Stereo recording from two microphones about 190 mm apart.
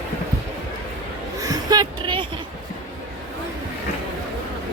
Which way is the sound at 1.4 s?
20° right (ahead or behind).